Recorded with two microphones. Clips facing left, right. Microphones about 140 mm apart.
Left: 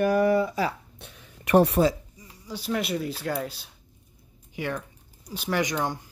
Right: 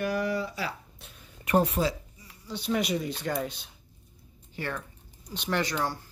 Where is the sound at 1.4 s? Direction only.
75° left (ahead or behind).